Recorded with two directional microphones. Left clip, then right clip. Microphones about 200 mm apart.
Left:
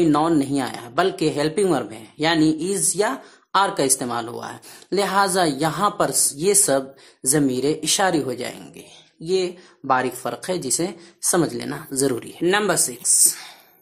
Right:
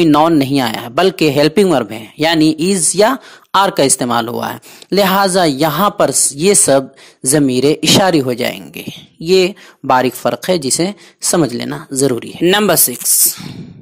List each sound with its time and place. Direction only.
0.0 s speech: 35° right (ahead or behind)
13.3 s speech: 25° right (ahead or behind)